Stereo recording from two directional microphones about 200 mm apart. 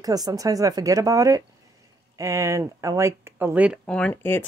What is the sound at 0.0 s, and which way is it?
Speech, 20° right (ahead or behind).